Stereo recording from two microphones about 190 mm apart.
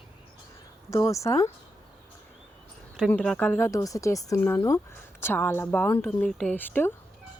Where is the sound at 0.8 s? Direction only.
15° left (ahead or behind).